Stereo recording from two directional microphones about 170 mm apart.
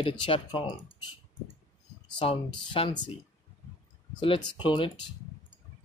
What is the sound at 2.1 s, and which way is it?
Speech, 30° left (ahead or behind).